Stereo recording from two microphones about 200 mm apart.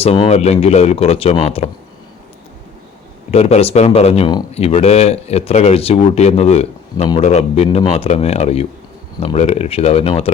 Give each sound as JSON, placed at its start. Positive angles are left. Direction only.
{"t": 0.0, "sound": "speech", "side_deg": 30}
{"t": 3.3, "sound": "speech", "side_deg": 30}